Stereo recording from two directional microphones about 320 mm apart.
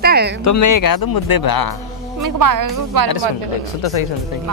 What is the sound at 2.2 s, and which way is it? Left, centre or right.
Speech, right.